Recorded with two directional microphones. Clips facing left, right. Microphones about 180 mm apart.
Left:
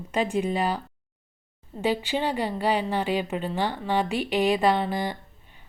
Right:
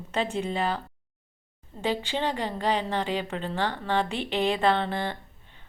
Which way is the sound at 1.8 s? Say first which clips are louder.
Left 2 dB; 10° left (ahead or behind).